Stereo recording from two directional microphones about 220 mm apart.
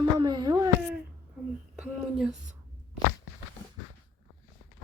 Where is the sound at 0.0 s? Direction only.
20° right (ahead or behind).